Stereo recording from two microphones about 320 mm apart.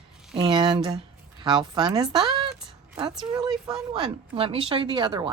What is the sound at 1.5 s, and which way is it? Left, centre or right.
Speech, centre.